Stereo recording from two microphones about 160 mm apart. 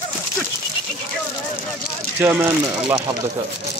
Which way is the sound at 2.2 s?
15° right (ahead or behind).